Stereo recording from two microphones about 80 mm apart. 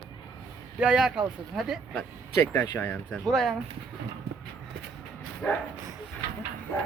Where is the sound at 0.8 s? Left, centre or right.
Centre.